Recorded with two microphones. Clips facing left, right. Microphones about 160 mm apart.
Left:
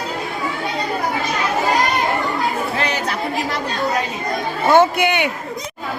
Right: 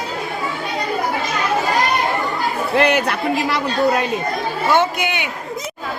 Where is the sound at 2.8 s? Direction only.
60° right (ahead or behind).